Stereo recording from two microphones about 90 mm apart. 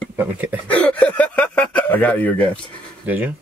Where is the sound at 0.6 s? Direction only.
15° left (ahead or behind).